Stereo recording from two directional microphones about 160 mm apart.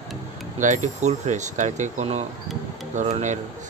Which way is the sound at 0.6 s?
50° right (ahead or behind).